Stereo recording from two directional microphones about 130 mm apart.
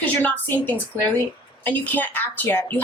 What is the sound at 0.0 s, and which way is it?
Speech, 10° left (ahead or behind).